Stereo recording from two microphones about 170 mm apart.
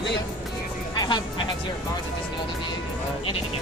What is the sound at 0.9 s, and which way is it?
Music, 25° left (ahead or behind).